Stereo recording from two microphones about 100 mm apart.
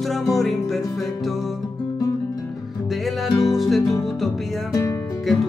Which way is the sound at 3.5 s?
Centre (ahead or behind).